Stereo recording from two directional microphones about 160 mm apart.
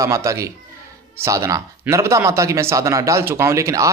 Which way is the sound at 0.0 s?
20° right (ahead or behind).